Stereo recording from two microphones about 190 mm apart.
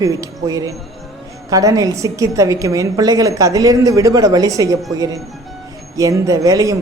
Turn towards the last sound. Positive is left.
turn(degrees=-15)  # may be behind; listen again after turning